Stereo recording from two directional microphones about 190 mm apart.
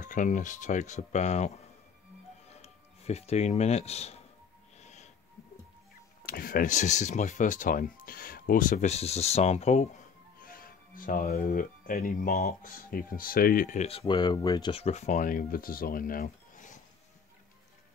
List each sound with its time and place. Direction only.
0.0 s speech: 45° left (ahead or behind)
4.7 s snort: 35° left (ahead or behind)
6.2 s speech: 50° left (ahead or behind)